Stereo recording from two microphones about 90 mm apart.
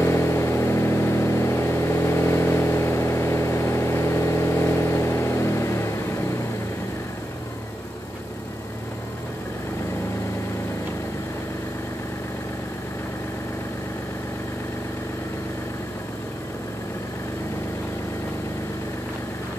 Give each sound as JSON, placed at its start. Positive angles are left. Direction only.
{"t": 0.0, "sound": "vehicle", "side_deg": 30}